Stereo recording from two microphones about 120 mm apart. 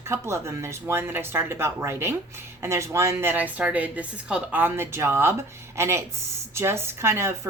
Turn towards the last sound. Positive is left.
turn(degrees=-20)  # may be behind; listen again after turning